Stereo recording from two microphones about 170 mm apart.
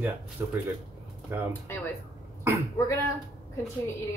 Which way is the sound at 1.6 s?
10° left (ahead or behind).